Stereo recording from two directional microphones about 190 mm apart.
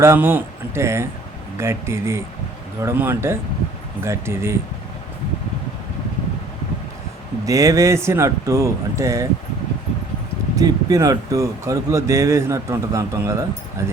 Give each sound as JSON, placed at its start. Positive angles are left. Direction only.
{"t": 0.0, "sound": "speech", "side_deg": -10}
{"t": 7.4, "sound": "speech", "side_deg": -15}
{"t": 10.5, "sound": "speech", "side_deg": -20}